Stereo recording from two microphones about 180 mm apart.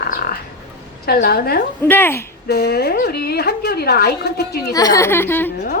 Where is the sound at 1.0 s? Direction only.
60° left (ahead or behind).